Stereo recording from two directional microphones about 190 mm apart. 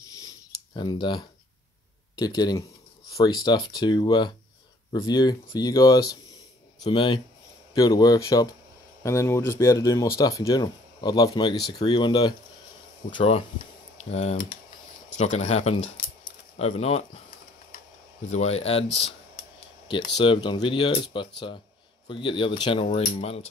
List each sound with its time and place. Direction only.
0.7 s speech: 25° left (ahead or behind)
13.9 s speech: 35° left (ahead or behind)
18.3 s speech: 35° left (ahead or behind)
20.2 s speech: 25° left (ahead or behind)